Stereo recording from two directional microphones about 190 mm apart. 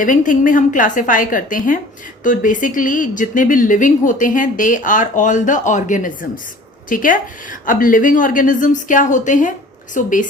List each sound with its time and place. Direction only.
0.0 s speech: 45° left (ahead or behind)